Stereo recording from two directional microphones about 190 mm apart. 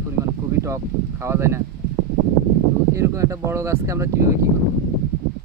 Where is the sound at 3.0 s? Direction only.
15° right (ahead or behind).